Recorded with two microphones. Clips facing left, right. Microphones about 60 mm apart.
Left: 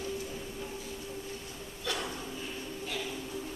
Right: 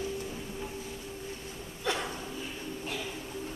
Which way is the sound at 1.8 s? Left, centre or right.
Right.